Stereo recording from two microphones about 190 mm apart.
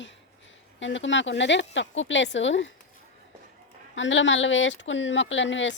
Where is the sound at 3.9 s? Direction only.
75° left (ahead or behind).